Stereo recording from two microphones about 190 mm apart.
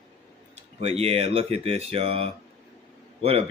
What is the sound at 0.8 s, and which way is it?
Speech, 30° right (ahead or behind).